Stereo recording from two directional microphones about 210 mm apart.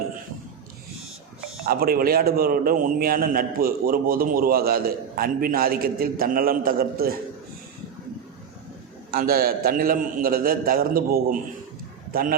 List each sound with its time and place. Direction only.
1.6 s a man's voice: 45° right (ahead or behind)
9.1 s a man's voice: 45° right (ahead or behind)